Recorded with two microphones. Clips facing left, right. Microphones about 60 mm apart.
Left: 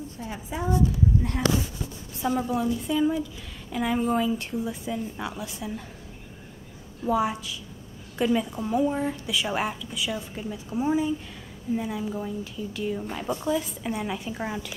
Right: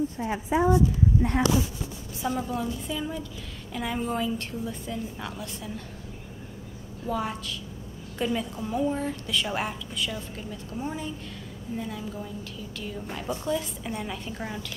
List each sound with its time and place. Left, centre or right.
0.2 s a woman's voice: right
2.1 s a woman's voice: centre
7.1 s a woman's voice: centre